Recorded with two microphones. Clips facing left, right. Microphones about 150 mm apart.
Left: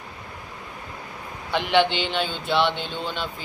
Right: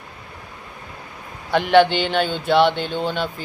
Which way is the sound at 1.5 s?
50° right (ahead or behind).